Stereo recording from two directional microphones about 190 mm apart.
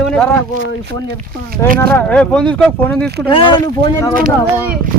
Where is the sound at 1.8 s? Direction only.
10° left (ahead or behind).